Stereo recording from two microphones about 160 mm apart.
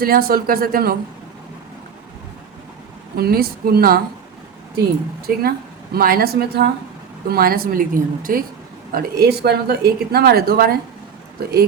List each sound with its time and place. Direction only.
0.0 s speech: 70° right (ahead or behind)
3.2 s speech: 75° right (ahead or behind)
5.2 s a woman's voice: 75° right (ahead or behind)